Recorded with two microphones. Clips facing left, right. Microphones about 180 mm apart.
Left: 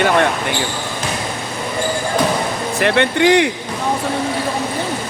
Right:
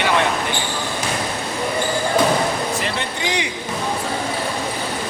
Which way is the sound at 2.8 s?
65° left (ahead or behind).